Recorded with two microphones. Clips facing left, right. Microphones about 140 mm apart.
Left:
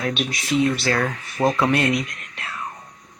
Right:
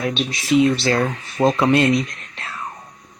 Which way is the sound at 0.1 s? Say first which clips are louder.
Right 4 dB; 25° right (ahead or behind).